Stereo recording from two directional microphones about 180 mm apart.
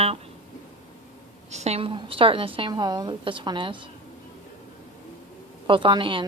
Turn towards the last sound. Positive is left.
turn(degrees=-30)  # may be behind; listen again after turning